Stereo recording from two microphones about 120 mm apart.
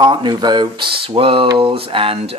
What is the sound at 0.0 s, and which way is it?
Speech, 40° right (ahead or behind).